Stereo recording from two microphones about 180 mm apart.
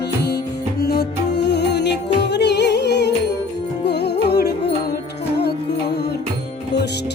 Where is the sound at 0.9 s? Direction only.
65° left (ahead or behind).